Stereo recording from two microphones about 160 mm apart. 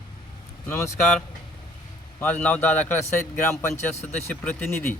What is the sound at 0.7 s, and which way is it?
Speech, 20° left (ahead or behind).